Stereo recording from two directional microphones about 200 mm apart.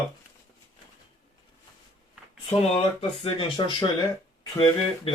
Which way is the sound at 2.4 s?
30° left (ahead or behind).